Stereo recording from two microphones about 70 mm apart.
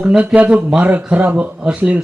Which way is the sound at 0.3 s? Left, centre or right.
Centre.